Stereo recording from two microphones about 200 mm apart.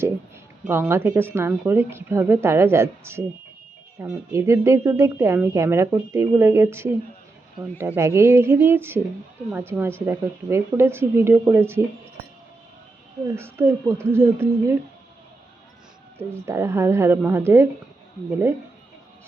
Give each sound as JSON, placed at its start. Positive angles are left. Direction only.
{"t": 0.7, "sound": "a woman's voice", "side_deg": -10}
{"t": 13.3, "sound": "a woman's voice", "side_deg": -15}
{"t": 16.1, "sound": "a woman's voice", "side_deg": -10}